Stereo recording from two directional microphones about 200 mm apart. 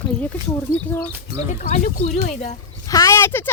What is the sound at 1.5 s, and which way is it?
Speech, 40° left (ahead or behind).